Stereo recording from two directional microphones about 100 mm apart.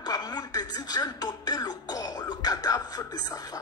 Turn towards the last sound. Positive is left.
turn(degrees=40)  # may be behind; listen again after turning